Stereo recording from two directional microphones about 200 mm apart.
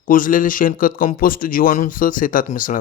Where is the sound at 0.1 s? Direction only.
45° left (ahead or behind).